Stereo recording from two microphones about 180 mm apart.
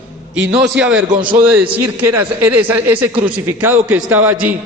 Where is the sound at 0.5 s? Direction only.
70° right (ahead or behind).